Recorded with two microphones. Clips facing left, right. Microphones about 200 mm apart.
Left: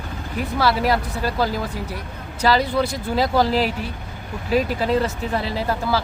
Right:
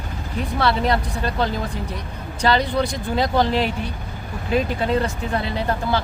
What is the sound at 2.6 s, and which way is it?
Speech, 5° left (ahead or behind).